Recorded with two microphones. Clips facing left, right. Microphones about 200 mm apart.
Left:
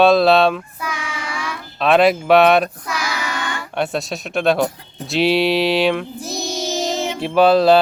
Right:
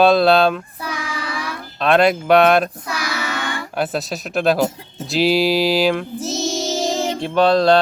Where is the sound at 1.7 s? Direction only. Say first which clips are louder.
Left 1 dB; centre (ahead or behind).